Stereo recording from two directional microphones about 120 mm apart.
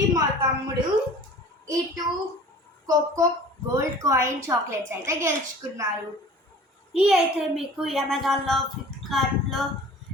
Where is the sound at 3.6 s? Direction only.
25° right (ahead or behind).